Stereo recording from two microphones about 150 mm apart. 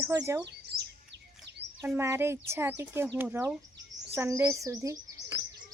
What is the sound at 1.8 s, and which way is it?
Speech, 15° right (ahead or behind).